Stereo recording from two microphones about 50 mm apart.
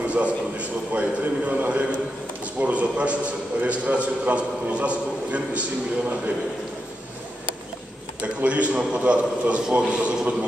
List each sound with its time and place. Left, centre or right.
0.0 s a man's voice: right
8.2 s a man's voice: right